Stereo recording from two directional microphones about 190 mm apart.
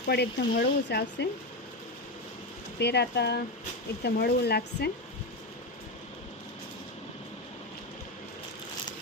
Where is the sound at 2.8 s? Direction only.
60° left (ahead or behind).